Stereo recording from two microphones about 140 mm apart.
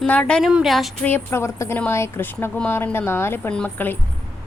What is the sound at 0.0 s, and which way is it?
Speech, 5° left (ahead or behind).